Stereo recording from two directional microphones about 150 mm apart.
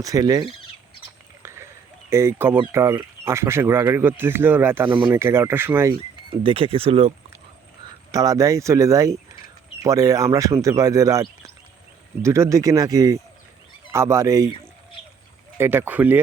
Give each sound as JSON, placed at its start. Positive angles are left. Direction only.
{"t": 0.0, "sound": "speech", "side_deg": -25}
{"t": 1.4, "sound": "a sound", "side_deg": -15}
{"t": 2.0, "sound": "speech", "side_deg": -15}
{"t": 6.4, "sound": "speech", "side_deg": -40}
{"t": 8.1, "sound": "speech", "side_deg": -25}
{"t": 15.5, "sound": "speech", "side_deg": -15}